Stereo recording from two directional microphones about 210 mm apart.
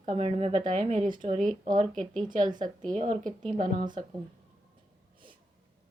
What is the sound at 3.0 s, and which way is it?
Speech, 35° right (ahead or behind).